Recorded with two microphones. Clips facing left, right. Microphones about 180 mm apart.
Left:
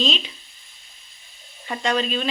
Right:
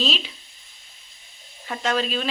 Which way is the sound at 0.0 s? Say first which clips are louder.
Left 2 dB; 5° right (ahead or behind).